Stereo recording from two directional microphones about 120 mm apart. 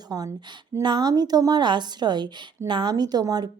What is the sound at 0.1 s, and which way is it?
A woman's voice, 25° right (ahead or behind).